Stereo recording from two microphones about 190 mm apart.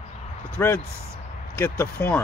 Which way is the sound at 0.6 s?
15° left (ahead or behind).